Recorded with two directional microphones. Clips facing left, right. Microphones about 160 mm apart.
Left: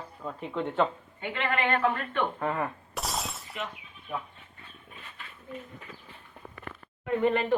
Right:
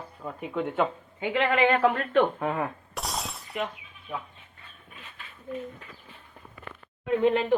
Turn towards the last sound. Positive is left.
turn(degrees=-15)  # may be behind; listen again after turning